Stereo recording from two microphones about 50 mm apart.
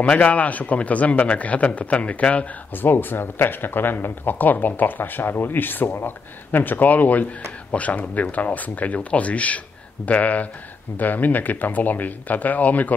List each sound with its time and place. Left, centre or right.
0.0 s a man's voice: left
2.7 s a man's voice: left